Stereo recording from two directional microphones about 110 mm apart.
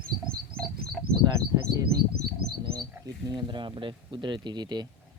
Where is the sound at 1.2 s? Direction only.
35° right (ahead or behind).